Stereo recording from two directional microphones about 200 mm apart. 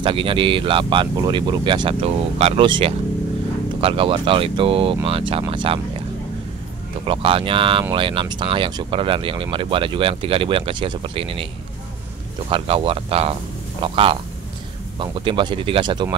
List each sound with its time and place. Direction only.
0.0 s speech: 25° right (ahead or behind)
7.1 s speech: 25° right (ahead or behind)
12.4 s speech: 25° right (ahead or behind)